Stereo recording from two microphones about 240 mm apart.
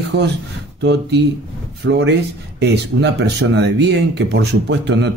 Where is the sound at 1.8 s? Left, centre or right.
Right.